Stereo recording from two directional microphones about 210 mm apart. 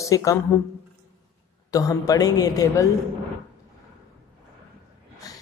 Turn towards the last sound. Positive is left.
turn(degrees=15)  # may be behind; listen again after turning